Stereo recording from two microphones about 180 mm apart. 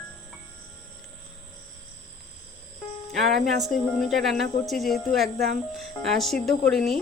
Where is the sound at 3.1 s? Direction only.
Centre (ahead or behind).